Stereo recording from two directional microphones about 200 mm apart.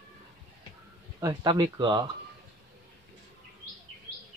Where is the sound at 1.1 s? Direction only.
20° right (ahead or behind).